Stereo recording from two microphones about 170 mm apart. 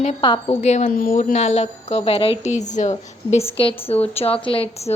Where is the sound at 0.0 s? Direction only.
35° left (ahead or behind).